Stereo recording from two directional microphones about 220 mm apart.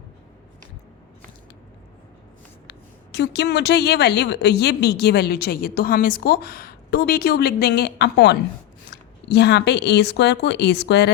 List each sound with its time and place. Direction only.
2.6 s a woman's voice: 50° left (ahead or behind)